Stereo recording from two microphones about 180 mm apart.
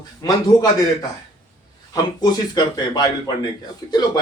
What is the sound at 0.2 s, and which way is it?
Speech, 20° left (ahead or behind).